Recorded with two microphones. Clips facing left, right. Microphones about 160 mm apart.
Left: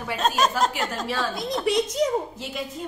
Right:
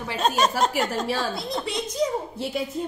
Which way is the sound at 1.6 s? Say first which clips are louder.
Left 5 dB; 15° left (ahead or behind).